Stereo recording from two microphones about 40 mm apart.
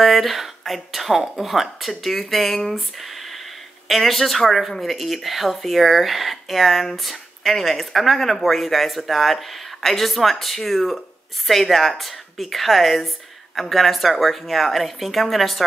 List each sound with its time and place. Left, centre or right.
0.0 s speech: centre